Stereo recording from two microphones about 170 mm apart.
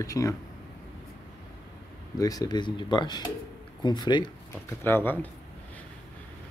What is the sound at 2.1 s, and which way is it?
Speech, 20° left (ahead or behind).